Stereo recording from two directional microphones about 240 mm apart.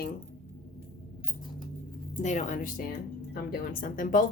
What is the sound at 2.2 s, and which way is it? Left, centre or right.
Speech, left.